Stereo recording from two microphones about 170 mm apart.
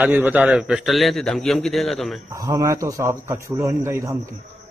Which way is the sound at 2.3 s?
20° right (ahead or behind).